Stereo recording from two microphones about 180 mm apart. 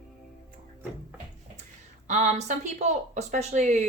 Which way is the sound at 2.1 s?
40° right (ahead or behind).